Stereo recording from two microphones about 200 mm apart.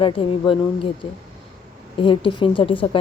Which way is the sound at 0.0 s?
25° left (ahead or behind).